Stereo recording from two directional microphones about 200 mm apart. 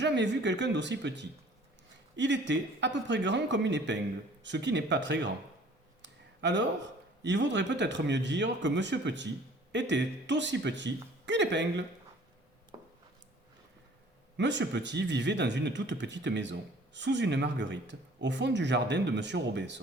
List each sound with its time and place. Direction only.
0.0 s speech: 60° right (ahead or behind)
6.0 s clicking: 65° right (ahead or behind)
7.2 s speech: 60° right (ahead or behind)
14.3 s speech: 65° right (ahead or behind)